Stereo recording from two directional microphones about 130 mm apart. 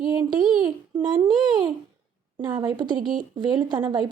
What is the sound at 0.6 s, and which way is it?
A woman's voice, 35° right (ahead or behind).